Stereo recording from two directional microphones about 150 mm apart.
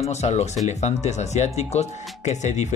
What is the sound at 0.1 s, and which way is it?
Speech, 45° left (ahead or behind).